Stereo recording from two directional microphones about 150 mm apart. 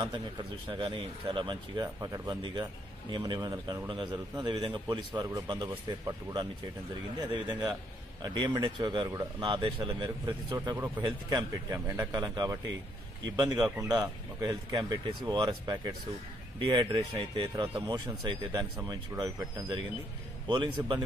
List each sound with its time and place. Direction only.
0.0 s a man's voice: 30° right (ahead or behind)